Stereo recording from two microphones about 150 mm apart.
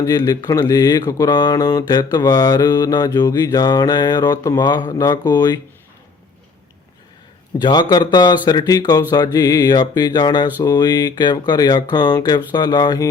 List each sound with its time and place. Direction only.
0.0 s mantra: 25° left (ahead or behind)
7.6 s mantra: 30° left (ahead or behind)